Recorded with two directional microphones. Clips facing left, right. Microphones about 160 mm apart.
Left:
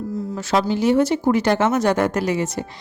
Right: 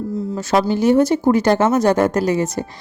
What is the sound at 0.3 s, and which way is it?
A woman's voice, 45° right (ahead or behind).